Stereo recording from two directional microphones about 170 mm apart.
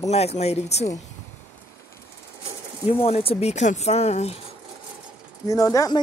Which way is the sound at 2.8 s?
35° left (ahead or behind).